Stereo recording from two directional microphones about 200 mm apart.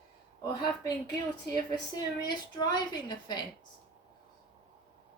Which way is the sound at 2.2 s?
20° left (ahead or behind).